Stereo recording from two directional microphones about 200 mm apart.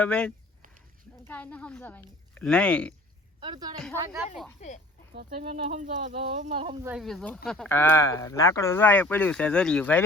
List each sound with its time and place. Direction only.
0.0 s speech: 5° left (ahead or behind)
3.4 s a woman's voice: 20° right (ahead or behind)
4.6 s speech: 35° left (ahead or behind)
5.4 s speech: 35° right (ahead or behind)
6.8 s speech: centre (ahead or behind)